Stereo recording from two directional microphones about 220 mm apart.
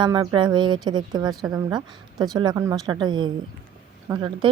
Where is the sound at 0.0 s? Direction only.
20° right (ahead or behind).